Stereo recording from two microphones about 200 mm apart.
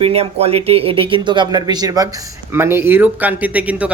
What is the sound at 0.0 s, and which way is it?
A man's voice, 30° right (ahead or behind).